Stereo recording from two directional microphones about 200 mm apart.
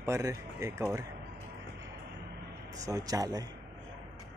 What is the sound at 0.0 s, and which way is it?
Speech, 15° right (ahead or behind).